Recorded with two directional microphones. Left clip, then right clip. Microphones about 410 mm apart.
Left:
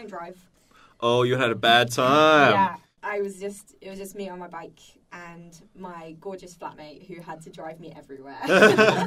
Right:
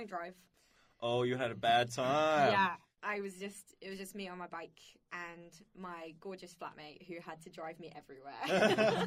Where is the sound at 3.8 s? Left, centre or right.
Left.